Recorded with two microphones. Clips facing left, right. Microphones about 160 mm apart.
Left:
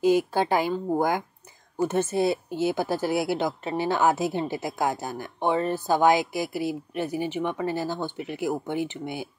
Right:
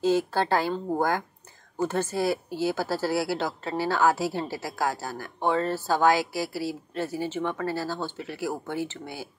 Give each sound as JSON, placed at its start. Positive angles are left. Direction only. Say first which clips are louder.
{"t": 0.0, "sound": "a woman's voice", "louder": "left 2 dB", "side_deg": 15}